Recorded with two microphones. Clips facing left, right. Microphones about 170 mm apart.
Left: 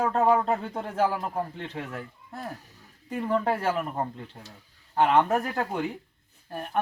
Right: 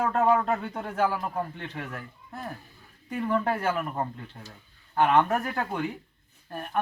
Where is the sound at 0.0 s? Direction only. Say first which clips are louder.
Left 1 dB; 25° left (ahead or behind).